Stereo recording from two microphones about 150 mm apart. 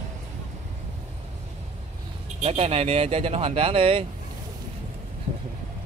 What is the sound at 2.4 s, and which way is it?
Speech, 45° right (ahead or behind).